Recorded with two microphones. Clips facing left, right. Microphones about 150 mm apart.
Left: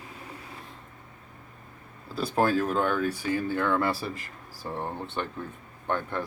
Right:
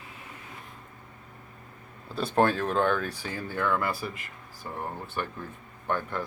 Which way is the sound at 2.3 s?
5° left (ahead or behind).